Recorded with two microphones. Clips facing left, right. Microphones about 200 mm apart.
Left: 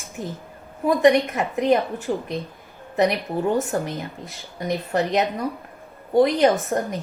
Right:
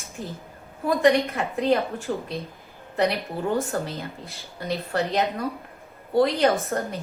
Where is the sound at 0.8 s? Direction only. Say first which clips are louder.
Left 3 dB; 15° left (ahead or behind).